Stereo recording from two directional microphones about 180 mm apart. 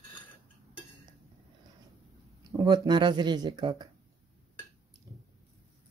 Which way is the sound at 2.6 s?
25° right (ahead or behind).